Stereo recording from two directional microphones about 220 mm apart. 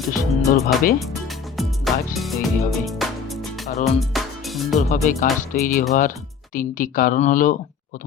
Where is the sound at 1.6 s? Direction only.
Centre (ahead or behind).